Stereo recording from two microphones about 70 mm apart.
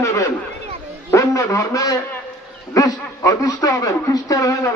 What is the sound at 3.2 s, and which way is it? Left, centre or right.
A man's voice, left.